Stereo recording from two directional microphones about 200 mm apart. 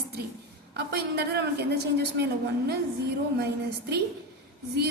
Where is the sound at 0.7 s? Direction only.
55° right (ahead or behind).